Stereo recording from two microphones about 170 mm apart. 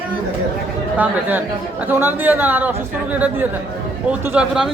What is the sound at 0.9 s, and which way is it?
A man's voice, 10° right (ahead or behind).